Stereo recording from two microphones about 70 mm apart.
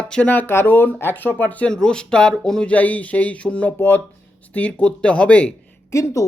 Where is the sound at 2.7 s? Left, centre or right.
Left.